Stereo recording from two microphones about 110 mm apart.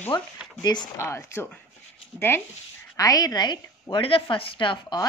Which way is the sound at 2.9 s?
35° left (ahead or behind).